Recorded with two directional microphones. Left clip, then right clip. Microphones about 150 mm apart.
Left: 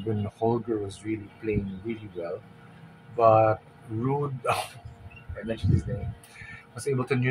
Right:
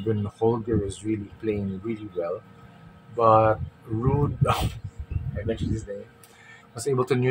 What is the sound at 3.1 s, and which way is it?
Speech, 20° right (ahead or behind).